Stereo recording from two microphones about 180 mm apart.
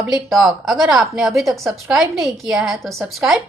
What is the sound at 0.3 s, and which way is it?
A woman's voice, centre (ahead or behind).